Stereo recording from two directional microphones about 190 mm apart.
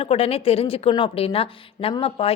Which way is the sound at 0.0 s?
30° left (ahead or behind).